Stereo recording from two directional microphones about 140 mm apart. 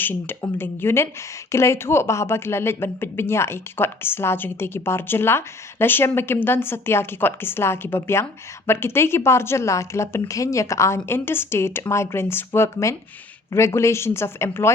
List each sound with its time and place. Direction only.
0.0 s speech: 15° left (ahead or behind)